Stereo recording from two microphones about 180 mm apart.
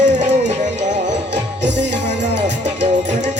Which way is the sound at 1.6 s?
75° right (ahead or behind).